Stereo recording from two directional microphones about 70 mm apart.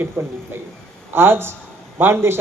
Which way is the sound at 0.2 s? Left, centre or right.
Right.